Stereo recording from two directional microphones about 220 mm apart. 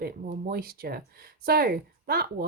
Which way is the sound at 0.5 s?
45° right (ahead or behind).